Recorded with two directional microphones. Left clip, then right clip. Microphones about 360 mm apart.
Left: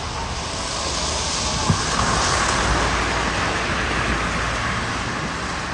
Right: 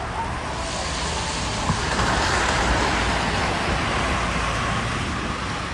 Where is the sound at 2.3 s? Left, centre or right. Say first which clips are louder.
Left 1 dB; right.